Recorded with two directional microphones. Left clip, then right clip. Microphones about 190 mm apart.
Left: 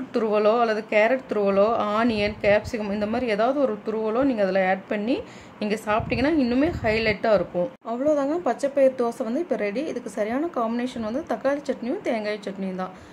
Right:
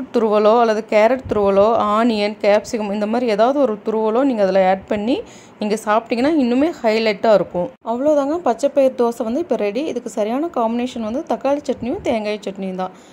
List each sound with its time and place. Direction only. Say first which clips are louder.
0.1 s speech: right 7 dB; 25° right (ahead or behind)